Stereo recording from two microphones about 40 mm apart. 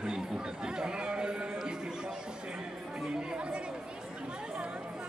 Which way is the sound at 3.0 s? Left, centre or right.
Centre.